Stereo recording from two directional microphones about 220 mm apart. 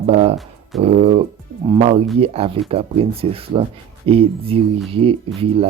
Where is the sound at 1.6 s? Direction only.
20° right (ahead or behind).